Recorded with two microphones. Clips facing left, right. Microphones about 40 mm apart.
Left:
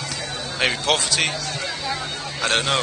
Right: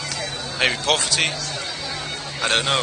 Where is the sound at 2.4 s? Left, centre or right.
Centre.